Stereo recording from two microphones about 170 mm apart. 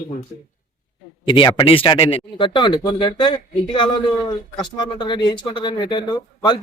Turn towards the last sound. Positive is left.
turn(degrees=25)  # may be behind; listen again after turning